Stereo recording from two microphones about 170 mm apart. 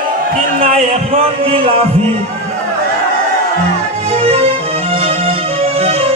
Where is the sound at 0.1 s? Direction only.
55° right (ahead or behind).